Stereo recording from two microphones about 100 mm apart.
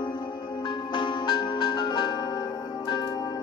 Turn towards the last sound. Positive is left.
turn(degrees=45)  # may be behind; listen again after turning